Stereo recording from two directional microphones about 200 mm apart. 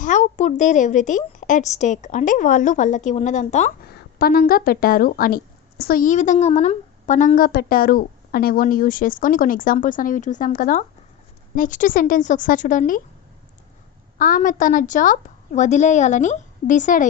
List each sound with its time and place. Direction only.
0.0 s a woman's voice: 40° left (ahead or behind)
3.8 s a woman's voice: 50° left (ahead or behind)
14.2 s a woman's voice: 45° left (ahead or behind)